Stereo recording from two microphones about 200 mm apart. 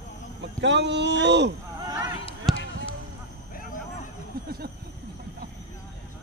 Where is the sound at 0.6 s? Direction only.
60° right (ahead or behind).